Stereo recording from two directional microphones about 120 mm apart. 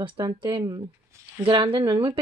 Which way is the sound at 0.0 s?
40° right (ahead or behind).